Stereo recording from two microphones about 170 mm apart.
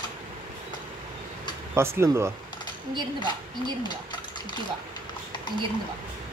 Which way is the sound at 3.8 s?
25° left (ahead or behind).